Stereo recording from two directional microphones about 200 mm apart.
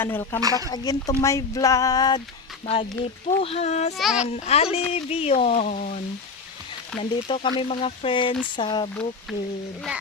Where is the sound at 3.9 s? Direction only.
Centre (ahead or behind).